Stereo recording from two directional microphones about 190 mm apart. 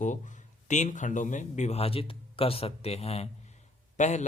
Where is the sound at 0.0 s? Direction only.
40° left (ahead or behind).